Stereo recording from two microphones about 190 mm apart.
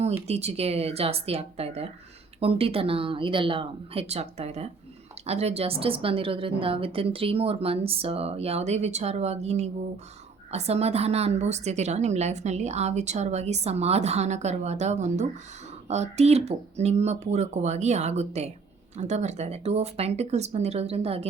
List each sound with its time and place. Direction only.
0.3 s a woman's voice: 35° right (ahead or behind)